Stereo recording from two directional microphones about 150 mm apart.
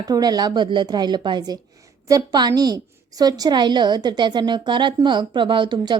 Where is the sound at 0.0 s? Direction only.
25° right (ahead or behind).